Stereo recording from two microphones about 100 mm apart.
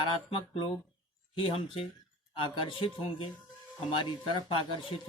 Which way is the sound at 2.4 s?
60° left (ahead or behind).